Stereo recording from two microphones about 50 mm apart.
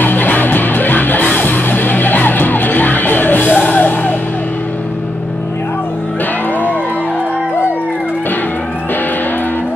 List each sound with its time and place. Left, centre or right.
0.0 s music: left